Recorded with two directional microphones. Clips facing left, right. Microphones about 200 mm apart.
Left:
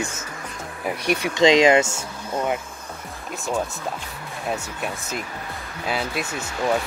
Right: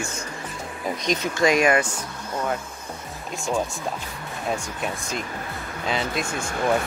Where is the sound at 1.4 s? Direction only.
20° left (ahead or behind).